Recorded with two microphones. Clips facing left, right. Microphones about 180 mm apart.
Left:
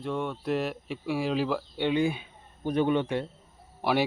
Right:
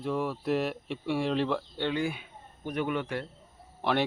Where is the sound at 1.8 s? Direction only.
20° left (ahead or behind).